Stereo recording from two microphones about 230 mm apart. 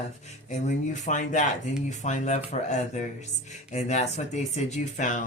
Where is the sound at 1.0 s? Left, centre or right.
Left.